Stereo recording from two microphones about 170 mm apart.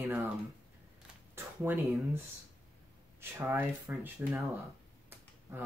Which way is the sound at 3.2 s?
15° right (ahead or behind).